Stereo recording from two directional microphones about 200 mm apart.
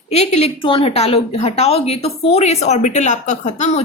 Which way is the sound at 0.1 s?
30° left (ahead or behind).